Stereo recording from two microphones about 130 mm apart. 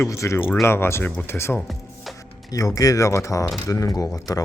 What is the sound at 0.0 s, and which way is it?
Speech, 20° left (ahead or behind).